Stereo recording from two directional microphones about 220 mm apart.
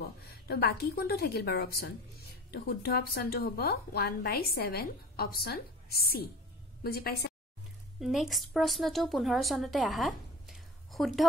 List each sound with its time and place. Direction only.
0.0 s speech: 45° left (ahead or behind)
8.0 s speech: centre (ahead or behind)